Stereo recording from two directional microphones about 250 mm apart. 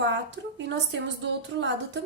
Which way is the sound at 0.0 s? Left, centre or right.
Right.